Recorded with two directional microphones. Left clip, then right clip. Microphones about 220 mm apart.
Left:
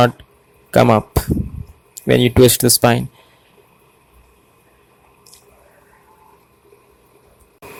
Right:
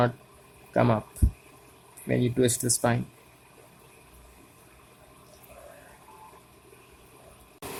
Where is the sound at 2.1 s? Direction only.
35° left (ahead or behind).